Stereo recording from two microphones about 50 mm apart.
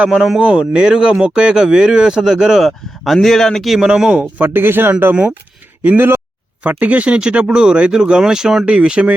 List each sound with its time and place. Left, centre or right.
0.3 s speech: centre
2.6 s speech: centre
3.8 s speech: centre
4.2 s speech: right
6.6 s speech: right